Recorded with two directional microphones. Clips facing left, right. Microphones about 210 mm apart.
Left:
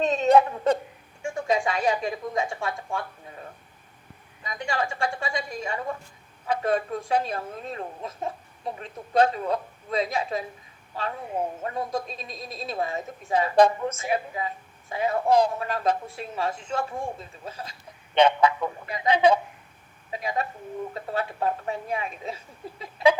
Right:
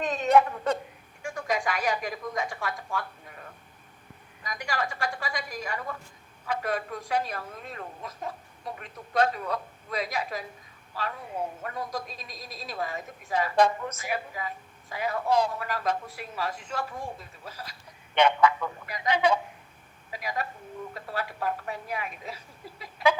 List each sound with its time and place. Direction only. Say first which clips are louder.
0.0 s a woman's voice: left 3 dB; 25° left (ahead or behind)
4.4 s a woman's voice: left 3 dB; 25° left (ahead or behind)
11.6 s a woman's voice: left 5 dB; 25° left (ahead or behind)